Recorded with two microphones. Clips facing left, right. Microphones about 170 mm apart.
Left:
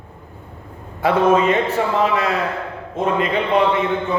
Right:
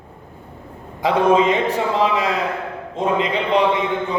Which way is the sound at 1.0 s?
15° right (ahead or behind).